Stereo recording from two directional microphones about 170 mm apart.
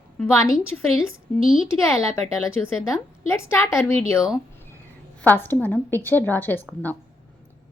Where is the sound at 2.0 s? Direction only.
15° left (ahead or behind).